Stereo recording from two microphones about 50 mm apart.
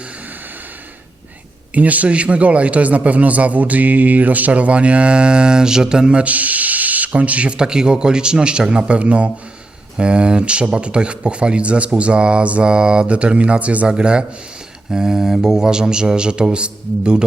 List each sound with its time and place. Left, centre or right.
1.7 s a man's voice: right
14.8 s mantra: centre